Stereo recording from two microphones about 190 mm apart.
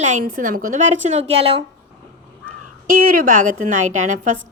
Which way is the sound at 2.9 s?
50° right (ahead or behind).